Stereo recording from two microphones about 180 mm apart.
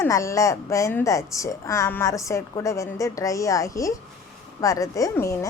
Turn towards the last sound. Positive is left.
turn(degrees=15)  # may be behind; listen again after turning